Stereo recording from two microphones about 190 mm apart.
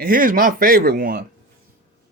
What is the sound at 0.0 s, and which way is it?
Speech, 45° right (ahead or behind).